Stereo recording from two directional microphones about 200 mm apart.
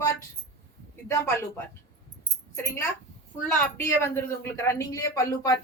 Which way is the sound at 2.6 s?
15° left (ahead or behind).